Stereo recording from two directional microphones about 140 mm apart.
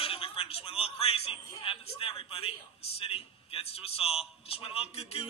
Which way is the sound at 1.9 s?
45° left (ahead or behind).